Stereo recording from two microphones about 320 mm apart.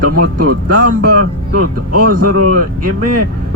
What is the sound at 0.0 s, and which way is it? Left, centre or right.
Speech, right.